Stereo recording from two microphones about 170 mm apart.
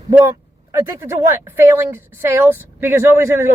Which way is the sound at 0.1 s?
15° right (ahead or behind).